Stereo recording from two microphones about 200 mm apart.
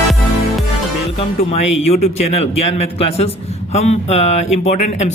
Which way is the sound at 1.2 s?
30° left (ahead or behind).